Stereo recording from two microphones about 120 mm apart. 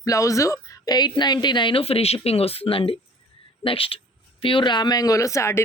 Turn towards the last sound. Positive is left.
turn(degrees=25)  # may be behind; listen again after turning